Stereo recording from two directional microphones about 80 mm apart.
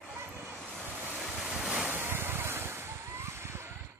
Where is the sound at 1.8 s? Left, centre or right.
Right.